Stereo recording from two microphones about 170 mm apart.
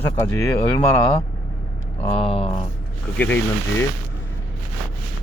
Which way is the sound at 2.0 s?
35° left (ahead or behind).